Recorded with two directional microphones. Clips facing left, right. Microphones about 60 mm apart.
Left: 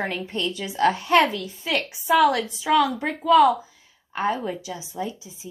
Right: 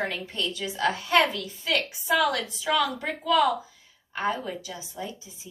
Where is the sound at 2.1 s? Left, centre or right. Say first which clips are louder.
Left 6 dB; centre.